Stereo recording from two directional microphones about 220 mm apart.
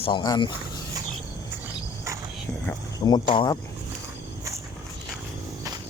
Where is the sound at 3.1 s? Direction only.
20° left (ahead or behind).